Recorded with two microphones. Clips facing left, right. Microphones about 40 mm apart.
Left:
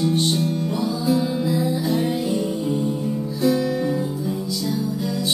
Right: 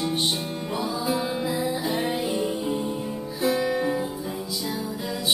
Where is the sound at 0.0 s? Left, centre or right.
Centre.